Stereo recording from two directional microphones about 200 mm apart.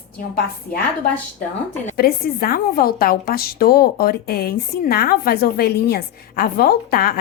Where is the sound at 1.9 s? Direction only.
50° left (ahead or behind).